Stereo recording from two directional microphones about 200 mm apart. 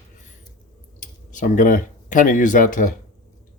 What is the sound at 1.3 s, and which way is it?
Speech, 40° left (ahead or behind).